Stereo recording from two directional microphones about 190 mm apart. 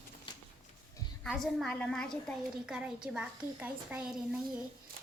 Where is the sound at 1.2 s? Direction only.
Centre (ahead or behind).